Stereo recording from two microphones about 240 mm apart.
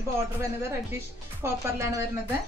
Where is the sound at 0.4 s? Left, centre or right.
Centre.